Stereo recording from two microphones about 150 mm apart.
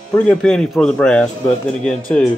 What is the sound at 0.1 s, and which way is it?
A man's voice, 10° left (ahead or behind).